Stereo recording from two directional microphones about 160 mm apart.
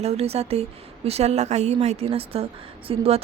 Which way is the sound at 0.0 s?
40° right (ahead or behind).